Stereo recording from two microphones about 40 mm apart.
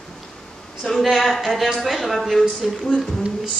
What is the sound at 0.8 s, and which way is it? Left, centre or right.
Speech, centre.